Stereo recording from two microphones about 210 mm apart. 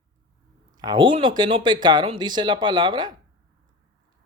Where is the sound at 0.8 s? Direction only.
20° right (ahead or behind).